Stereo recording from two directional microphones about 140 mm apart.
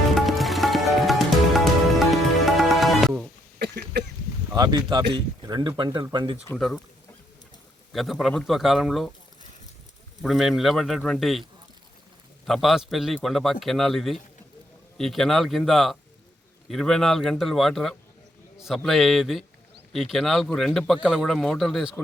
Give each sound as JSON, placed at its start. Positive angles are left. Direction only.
{"t": 0.1, "sound": "music", "side_deg": 0}
{"t": 4.5, "sound": "speech", "side_deg": -30}
{"t": 6.6, "sound": "a man's voice", "side_deg": 0}
{"t": 7.9, "sound": "a man's voice", "side_deg": 0}
{"t": 10.2, "sound": "a man's voice", "side_deg": 0}
{"t": 12.5, "sound": "a man's voice", "side_deg": 0}